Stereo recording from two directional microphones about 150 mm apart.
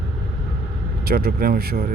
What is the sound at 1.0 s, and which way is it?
Speech, 90° right.